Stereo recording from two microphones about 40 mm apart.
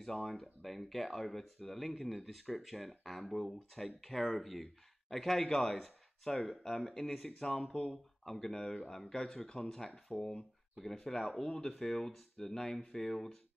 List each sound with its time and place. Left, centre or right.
0.0 s speech: centre
8.3 s speech: centre